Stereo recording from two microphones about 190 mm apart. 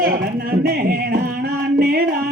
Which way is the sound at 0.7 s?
50° right (ahead or behind).